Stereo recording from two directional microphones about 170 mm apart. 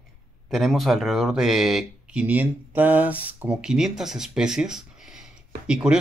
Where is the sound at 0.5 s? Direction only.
Centre (ahead or behind).